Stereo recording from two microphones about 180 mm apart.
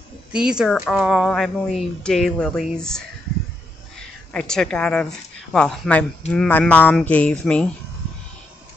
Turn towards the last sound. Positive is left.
turn(degrees=5)  # may be behind; listen again after turning